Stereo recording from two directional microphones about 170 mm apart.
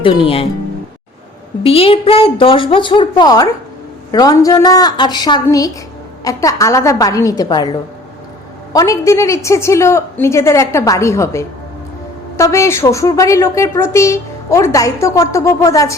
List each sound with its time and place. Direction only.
0.0 s a woman's voice: 30° left (ahead or behind)
1.6 s a woman's voice: 35° left (ahead or behind)